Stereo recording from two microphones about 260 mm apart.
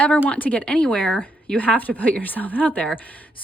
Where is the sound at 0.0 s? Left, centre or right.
Centre.